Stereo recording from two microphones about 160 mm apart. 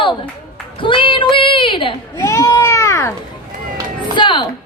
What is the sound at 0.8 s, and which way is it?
Child singing, 30° left (ahead or behind).